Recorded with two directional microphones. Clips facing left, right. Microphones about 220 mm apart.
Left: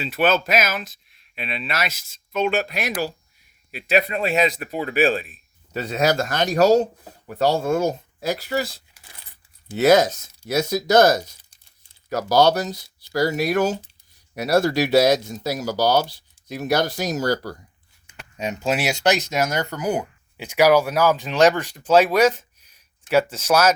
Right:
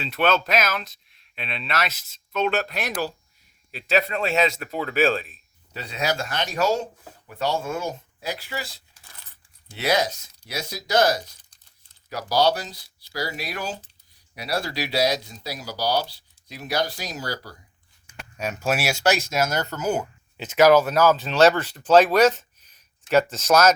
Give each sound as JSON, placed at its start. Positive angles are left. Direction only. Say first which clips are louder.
{"t": 0.0, "sound": "speech", "louder": "left 2 dB", "side_deg": 5}
{"t": 5.7, "sound": "speech", "louder": "left 6 dB", "side_deg": 45}
{"t": 9.7, "sound": "speech", "louder": "left 8 dB", "side_deg": 45}
{"t": 18.0, "sound": "speech", "louder": "left 2 dB", "side_deg": 20}